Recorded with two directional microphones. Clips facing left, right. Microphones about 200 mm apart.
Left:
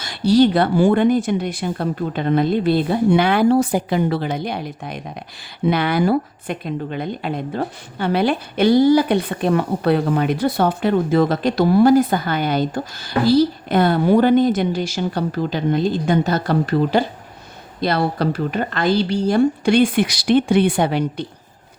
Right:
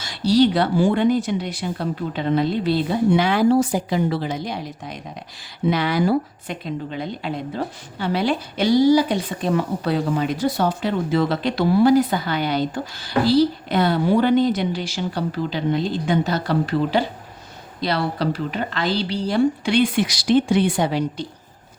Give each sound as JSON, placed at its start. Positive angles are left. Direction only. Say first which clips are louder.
{"t": 0.0, "sound": "a woman's voice", "louder": "left 2 dB", "side_deg": 55}